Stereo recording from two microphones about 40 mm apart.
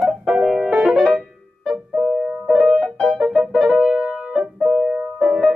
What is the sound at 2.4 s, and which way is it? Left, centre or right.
Music, centre.